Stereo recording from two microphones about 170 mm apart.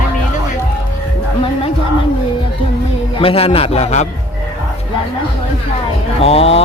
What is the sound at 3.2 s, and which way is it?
Speech, 35° left (ahead or behind).